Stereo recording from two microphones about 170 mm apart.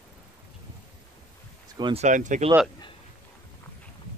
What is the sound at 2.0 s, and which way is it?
Speech, 45° right (ahead or behind).